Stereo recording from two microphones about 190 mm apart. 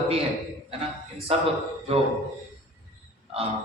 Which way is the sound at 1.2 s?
30° right (ahead or behind).